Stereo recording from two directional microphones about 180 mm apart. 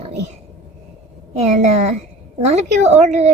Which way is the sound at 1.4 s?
40° right (ahead or behind).